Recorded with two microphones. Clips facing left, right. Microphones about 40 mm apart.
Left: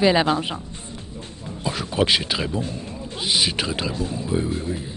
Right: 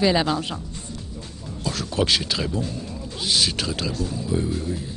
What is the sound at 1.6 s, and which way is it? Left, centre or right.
A woman's voice, left.